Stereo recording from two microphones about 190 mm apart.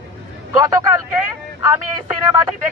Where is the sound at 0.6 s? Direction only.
15° right (ahead or behind).